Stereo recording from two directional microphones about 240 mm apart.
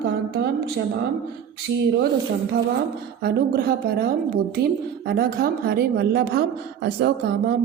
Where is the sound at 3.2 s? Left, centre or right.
Right.